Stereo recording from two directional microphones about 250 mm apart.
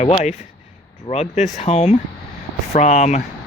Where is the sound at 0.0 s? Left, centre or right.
Left.